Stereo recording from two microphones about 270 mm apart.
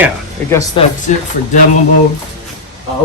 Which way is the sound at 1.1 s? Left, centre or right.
Left.